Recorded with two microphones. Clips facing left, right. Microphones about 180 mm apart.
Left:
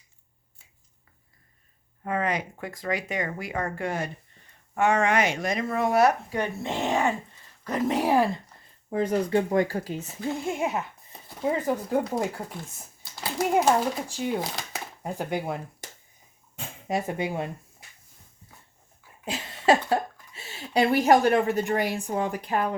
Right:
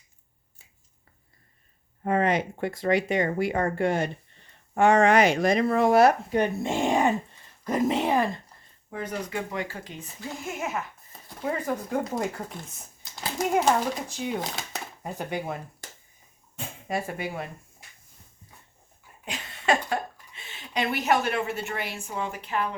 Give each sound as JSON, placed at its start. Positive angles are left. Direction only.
{"t": 2.0, "sound": "speech", "side_deg": -25}
{"t": 6.4, "sound": "speech", "side_deg": -15}
{"t": 7.9, "sound": "speech", "side_deg": 5}
{"t": 8.9, "sound": "speech", "side_deg": 30}
{"t": 11.3, "sound": "speech", "side_deg": 15}
{"t": 17.1, "sound": "speech", "side_deg": 20}
{"t": 19.2, "sound": "a sound", "side_deg": 30}